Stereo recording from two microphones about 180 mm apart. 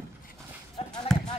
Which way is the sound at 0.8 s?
35° left (ahead or behind).